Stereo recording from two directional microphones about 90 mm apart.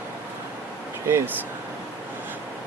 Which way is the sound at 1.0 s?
30° right (ahead or behind).